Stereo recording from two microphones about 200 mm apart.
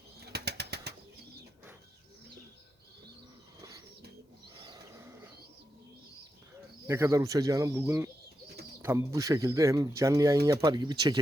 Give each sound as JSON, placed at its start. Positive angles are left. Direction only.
{"t": 0.2, "sound": "bird", "side_deg": -55}
{"t": 3.6, "sound": "bird", "side_deg": -15}
{"t": 6.8, "sound": "speech", "side_deg": -15}